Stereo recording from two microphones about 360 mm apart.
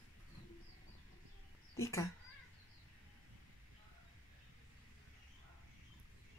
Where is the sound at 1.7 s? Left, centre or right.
Centre.